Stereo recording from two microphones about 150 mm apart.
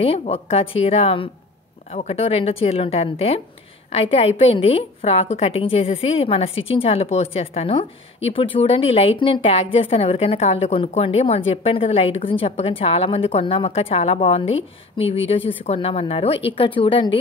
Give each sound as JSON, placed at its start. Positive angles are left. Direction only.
{"t": 0.0, "sound": "a woman's voice", "side_deg": 40}